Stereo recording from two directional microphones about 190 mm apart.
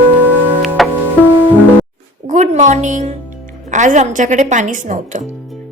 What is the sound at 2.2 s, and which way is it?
A woman's voice, 40° right (ahead or behind).